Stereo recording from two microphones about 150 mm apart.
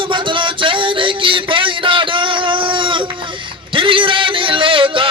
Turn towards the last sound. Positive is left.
turn(degrees=-35)  # may be behind; listen again after turning